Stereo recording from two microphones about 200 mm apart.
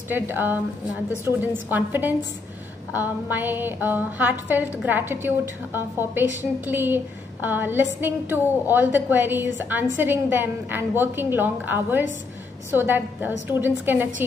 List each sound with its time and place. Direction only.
0.1 s a woman's voice: 10° right (ahead or behind)